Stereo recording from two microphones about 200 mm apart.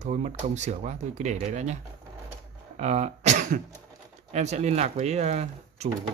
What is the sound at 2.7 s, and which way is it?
Cough, 35° right (ahead or behind).